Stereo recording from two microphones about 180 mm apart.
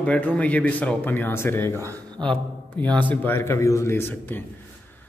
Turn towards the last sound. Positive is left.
turn(degrees=10)  # may be behind; listen again after turning